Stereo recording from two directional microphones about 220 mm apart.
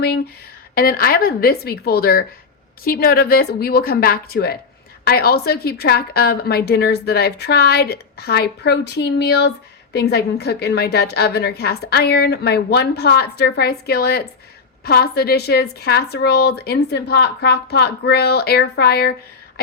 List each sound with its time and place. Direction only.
0.8 s a woman's voice: 40° left (ahead or behind)